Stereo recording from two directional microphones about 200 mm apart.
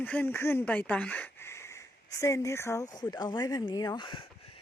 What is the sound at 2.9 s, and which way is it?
Speech, 20° left (ahead or behind).